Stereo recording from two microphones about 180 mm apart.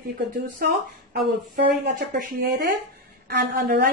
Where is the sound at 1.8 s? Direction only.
45° right (ahead or behind).